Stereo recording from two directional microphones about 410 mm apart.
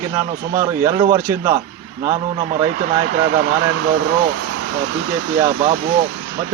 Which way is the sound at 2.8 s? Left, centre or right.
Centre.